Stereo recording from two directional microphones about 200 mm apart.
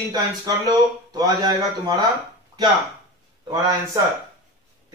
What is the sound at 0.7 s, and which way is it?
A man's voice, 20° right (ahead or behind).